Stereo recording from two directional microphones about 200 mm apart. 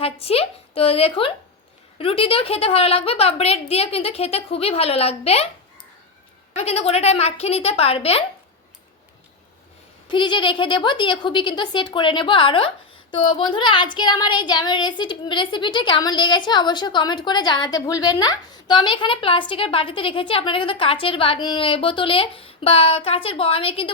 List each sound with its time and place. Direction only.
0.0 s a woman's voice: 30° left (ahead or behind)
6.6 s a woman's voice: 30° left (ahead or behind)
10.1 s a woman's voice: 25° left (ahead or behind)